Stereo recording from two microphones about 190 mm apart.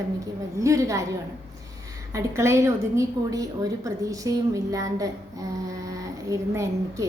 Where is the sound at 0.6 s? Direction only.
15° right (ahead or behind).